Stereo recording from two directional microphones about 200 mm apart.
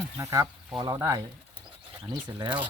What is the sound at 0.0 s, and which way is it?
Speech, 15° right (ahead or behind).